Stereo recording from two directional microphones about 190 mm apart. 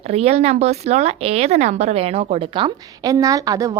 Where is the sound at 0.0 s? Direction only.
35° right (ahead or behind).